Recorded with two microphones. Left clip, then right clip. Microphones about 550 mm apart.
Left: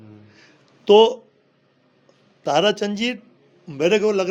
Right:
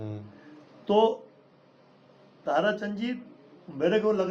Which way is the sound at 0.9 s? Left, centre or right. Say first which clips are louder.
Left 10 dB; left.